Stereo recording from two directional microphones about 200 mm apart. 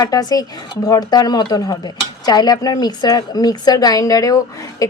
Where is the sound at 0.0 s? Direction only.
20° left (ahead or behind).